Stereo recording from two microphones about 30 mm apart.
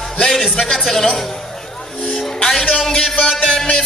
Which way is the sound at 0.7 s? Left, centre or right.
Centre.